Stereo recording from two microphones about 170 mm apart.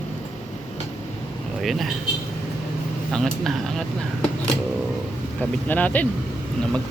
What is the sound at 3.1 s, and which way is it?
Speech, 5° left (ahead or behind).